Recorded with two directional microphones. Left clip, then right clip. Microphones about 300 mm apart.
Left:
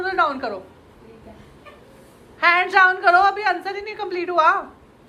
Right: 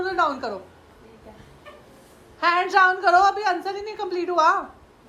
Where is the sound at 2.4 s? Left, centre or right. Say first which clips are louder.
Left 3 dB; centre.